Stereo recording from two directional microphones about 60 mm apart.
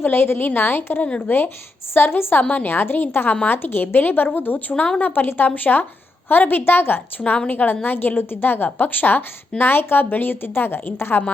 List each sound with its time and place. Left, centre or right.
0.0 s a woman's voice: left